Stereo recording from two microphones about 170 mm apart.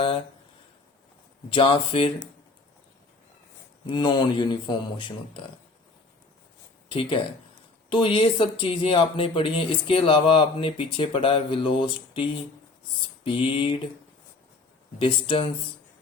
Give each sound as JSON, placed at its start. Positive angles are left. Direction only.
{"t": 1.5, "sound": "speech", "side_deg": 30}
{"t": 3.8, "sound": "speech", "side_deg": 25}
{"t": 6.9, "sound": "speech", "side_deg": 30}
{"t": 13.2, "sound": "speech", "side_deg": 30}
{"t": 14.9, "sound": "speech", "side_deg": 30}